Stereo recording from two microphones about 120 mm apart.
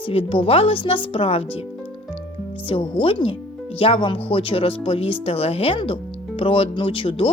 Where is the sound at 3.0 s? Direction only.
50° left (ahead or behind).